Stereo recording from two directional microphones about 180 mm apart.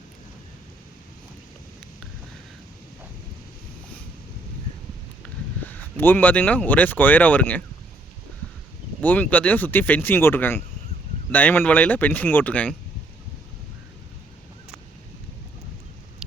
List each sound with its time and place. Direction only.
5.6 s speech: 10° left (ahead or behind)
9.0 s speech: 10° left (ahead or behind)